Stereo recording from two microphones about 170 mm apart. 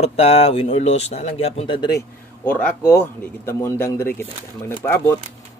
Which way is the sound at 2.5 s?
10° left (ahead or behind).